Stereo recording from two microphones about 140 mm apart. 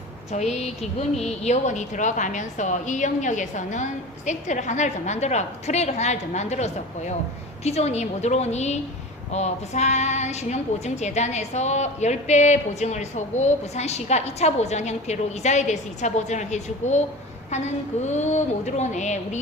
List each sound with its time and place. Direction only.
0.3 s a woman's voice: 55° left (ahead or behind)